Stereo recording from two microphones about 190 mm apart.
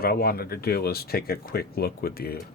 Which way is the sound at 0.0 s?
55° left (ahead or behind).